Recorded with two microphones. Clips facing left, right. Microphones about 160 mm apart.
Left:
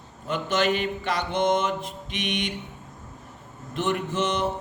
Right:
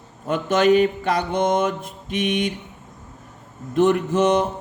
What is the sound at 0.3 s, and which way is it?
Mantra, 50° right (ahead or behind).